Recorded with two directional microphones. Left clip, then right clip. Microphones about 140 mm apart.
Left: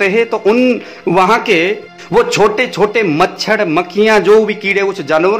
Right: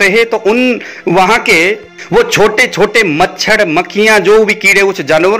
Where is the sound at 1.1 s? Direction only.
15° right (ahead or behind).